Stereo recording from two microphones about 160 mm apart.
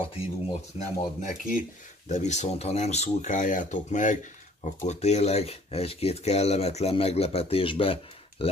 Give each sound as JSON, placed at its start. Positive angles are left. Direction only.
{"t": 0.7, "sound": "speech", "side_deg": 55}